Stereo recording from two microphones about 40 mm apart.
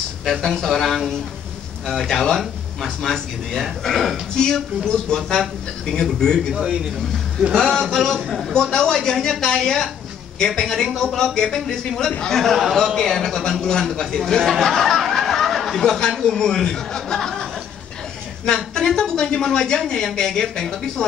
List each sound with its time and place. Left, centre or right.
0.2 s a man's voice: centre
6.5 s speech: right
7.5 s a man's voice: centre
8.7 s speech: centre
14.5 s a sound: centre
15.8 s speech: centre
18.9 s speech: centre